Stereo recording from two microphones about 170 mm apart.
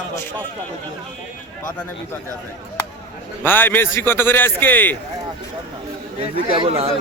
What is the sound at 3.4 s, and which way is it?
A man's voice, 10° left (ahead or behind).